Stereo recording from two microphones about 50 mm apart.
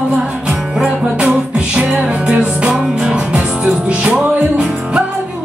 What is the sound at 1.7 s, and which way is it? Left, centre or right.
Music, right.